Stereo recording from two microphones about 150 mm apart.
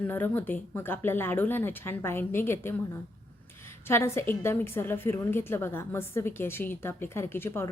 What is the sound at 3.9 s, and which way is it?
A woman's voice, 15° left (ahead or behind).